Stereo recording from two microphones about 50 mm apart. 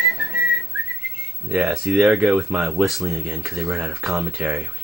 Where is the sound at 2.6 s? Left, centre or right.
Centre.